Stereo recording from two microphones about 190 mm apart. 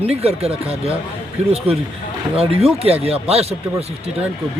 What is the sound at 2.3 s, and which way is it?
Speech, 30° right (ahead or behind).